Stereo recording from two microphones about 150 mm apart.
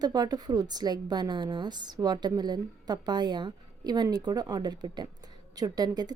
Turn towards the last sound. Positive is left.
turn(degrees=-25)  # may be behind; listen again after turning